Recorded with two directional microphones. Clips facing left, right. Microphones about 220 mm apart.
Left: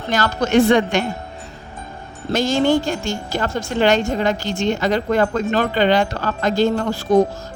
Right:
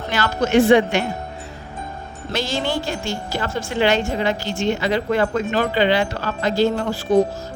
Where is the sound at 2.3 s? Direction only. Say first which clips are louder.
Left 7 dB; 45° left (ahead or behind).